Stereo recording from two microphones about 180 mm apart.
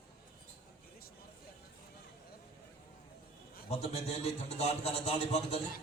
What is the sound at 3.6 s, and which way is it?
A man's voice, 35° left (ahead or behind).